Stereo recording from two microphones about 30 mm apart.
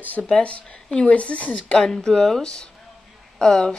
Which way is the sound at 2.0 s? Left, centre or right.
Left.